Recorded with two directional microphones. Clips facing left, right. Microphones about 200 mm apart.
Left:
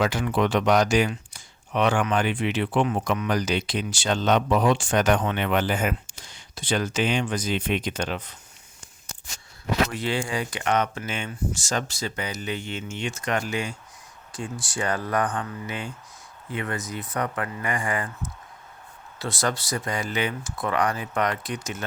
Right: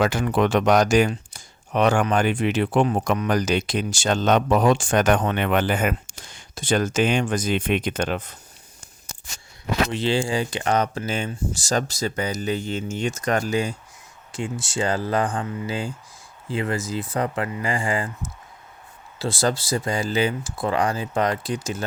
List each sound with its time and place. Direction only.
0.0 s speech: 50° right (ahead or behind)
9.9 s speech: 30° right (ahead or behind)
14.3 s speech: 25° right (ahead or behind)